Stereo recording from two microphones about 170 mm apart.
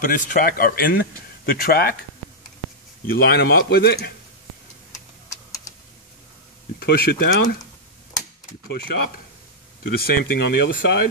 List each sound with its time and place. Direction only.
0.0 s speech: 50° left (ahead or behind)
3.1 s speech: 65° left (ahead or behind)
6.8 s speech: 65° left (ahead or behind)
9.9 s speech: 65° left (ahead or behind)